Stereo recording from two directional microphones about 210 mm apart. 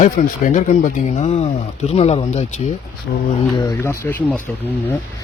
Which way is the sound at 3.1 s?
50° left (ahead or behind).